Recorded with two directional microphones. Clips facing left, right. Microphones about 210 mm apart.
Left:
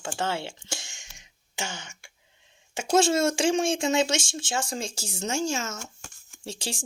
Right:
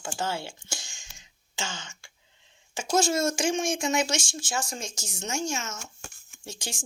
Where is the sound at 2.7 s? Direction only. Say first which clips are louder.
Left 3 dB; 30° left (ahead or behind).